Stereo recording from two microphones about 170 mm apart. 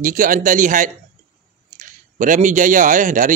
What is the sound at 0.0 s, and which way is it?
Speech, 50° right (ahead or behind).